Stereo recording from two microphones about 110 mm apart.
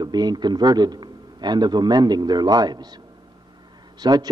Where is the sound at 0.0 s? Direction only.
40° right (ahead or behind).